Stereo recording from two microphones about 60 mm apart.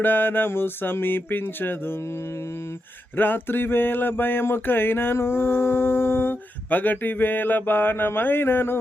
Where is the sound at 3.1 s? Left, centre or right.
Left.